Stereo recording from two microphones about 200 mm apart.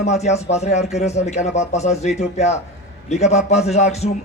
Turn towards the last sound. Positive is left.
turn(degrees=30)  # may be behind; listen again after turning